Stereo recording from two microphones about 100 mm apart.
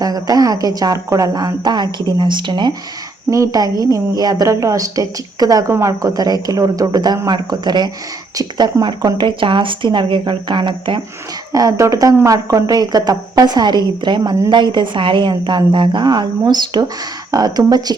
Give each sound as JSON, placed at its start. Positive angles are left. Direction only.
{"t": 0.0, "sound": "speech", "side_deg": -40}
{"t": 3.2, "sound": "speech", "side_deg": -35}
{"t": 11.5, "sound": "speech", "side_deg": -35}